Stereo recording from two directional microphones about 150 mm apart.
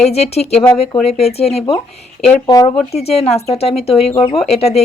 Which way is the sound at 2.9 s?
45° left (ahead or behind).